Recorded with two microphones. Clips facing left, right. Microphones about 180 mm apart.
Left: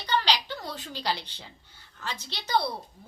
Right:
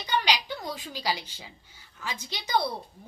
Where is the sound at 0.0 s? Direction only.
10° right (ahead or behind).